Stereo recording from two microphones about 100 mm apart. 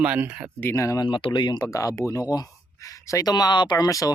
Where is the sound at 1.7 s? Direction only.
35° left (ahead or behind).